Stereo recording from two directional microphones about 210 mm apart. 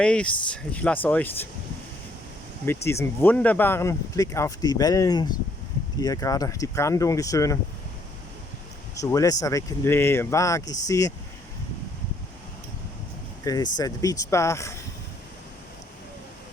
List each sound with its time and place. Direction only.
0.0 s speech: 5° left (ahead or behind)
2.8 s speech: 10° left (ahead or behind)
9.0 s speech: 15° left (ahead or behind)
13.4 s speech: 15° left (ahead or behind)